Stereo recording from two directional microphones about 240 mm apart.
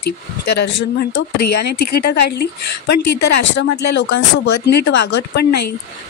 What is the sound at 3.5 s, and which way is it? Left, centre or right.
Speech, left.